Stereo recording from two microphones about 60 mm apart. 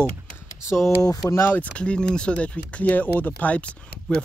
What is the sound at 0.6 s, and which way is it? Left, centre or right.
Speech, left.